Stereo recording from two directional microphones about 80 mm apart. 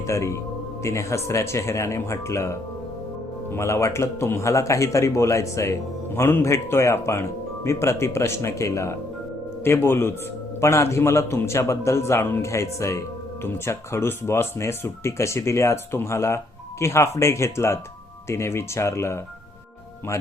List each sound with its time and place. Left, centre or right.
0.1 s speech: left